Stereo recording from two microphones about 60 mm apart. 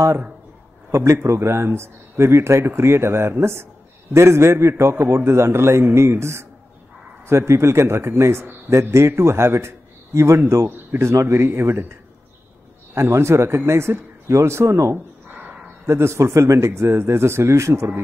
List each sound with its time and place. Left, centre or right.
0.9 s a man's voice: right
12.9 s a man's voice: right
16.5 s a man's voice: right